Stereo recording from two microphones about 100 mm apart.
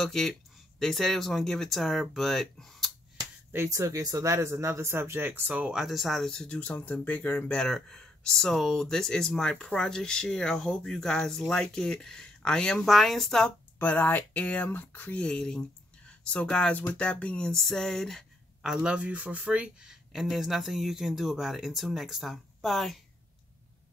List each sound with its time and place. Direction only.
0.0 s speech: 5° left (ahead or behind)
3.5 s speech: 30° right (ahead or behind)
5.5 s speech: 5° right (ahead or behind)
13.7 s speech: 15° left (ahead or behind)